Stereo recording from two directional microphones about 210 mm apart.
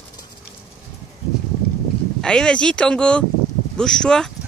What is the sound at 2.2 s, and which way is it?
Speech, 5° left (ahead or behind).